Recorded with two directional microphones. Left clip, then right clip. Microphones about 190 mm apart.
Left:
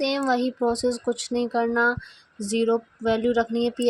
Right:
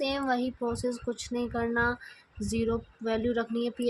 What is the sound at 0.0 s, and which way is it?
Female singing, 30° left (ahead or behind).